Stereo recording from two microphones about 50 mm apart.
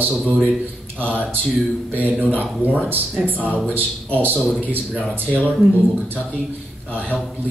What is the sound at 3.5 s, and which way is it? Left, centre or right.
Speech, left.